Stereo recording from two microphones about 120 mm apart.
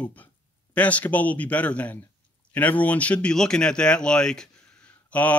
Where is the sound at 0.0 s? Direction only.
15° left (ahead or behind).